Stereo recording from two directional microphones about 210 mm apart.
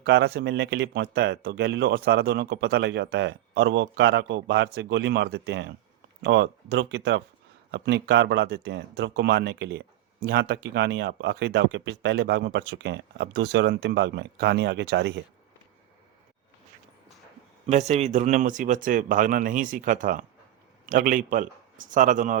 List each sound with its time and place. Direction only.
0.0 s speech: 55° right (ahead or behind)
17.7 s speech: 30° right (ahead or behind)